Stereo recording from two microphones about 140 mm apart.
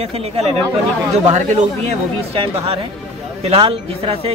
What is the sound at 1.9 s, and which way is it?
A man's voice, 45° right (ahead or behind).